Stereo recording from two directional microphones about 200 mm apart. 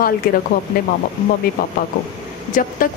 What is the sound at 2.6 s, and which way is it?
Speech, 40° left (ahead or behind).